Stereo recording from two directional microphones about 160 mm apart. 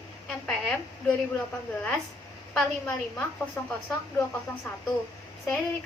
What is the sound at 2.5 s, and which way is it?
A woman's voice, 5° left (ahead or behind).